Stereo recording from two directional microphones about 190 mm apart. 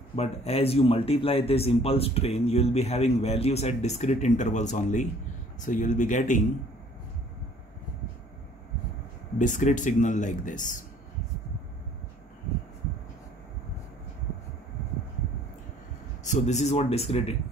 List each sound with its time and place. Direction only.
0.1 s speech: 30° left (ahead or behind)
9.4 s speech: 40° left (ahead or behind)
16.3 s speech: 40° left (ahead or behind)